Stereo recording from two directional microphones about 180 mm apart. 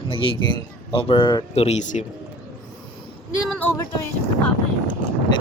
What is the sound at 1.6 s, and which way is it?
Speech, 40° left (ahead or behind).